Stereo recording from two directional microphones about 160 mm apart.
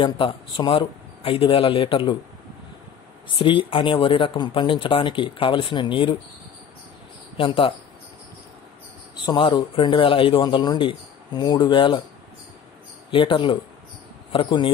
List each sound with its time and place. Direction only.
0.0 s speech: 30° left (ahead or behind)
3.3 s speech: 30° left (ahead or behind)
7.3 s speech: 35° left (ahead or behind)
9.2 s speech: 30° left (ahead or behind)
13.1 s speech: 30° left (ahead or behind)